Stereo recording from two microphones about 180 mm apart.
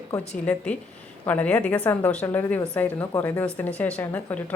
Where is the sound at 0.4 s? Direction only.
5° left (ahead or behind).